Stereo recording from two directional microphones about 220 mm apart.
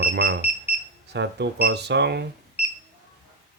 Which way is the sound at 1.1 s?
50° right (ahead or behind).